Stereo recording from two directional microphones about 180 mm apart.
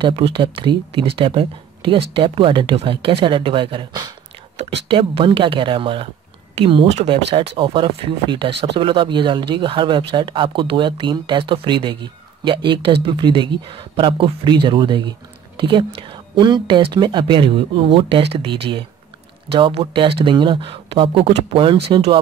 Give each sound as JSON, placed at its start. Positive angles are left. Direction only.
{"t": 0.0, "sound": "speech", "side_deg": -30}